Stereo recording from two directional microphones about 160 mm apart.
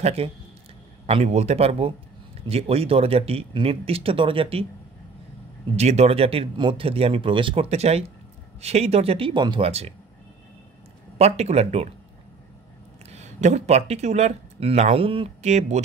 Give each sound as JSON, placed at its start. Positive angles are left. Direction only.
{"t": 0.0, "sound": "speech", "side_deg": -40}
{"t": 5.8, "sound": "speech", "side_deg": -40}
{"t": 11.1, "sound": "speech", "side_deg": -40}
{"t": 13.1, "sound": "speech", "side_deg": -45}